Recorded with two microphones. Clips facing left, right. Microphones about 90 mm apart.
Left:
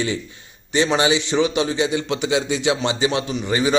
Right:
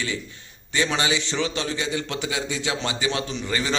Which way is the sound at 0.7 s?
20° left (ahead or behind).